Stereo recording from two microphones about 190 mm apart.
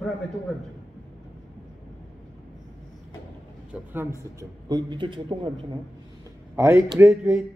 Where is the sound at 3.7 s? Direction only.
10° right (ahead or behind).